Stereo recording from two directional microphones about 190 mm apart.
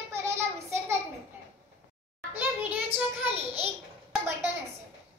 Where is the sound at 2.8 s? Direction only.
30° right (ahead or behind).